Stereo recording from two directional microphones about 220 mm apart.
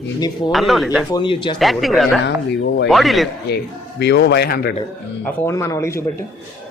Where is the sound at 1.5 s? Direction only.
Centre (ahead or behind).